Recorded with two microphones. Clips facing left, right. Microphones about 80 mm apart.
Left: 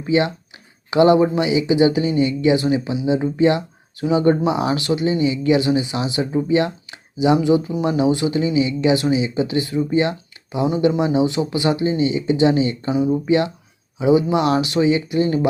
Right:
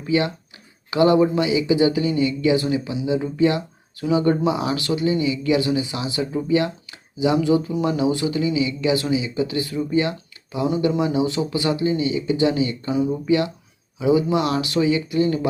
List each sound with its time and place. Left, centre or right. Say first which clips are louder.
0.0 s speech: left 3 dB; left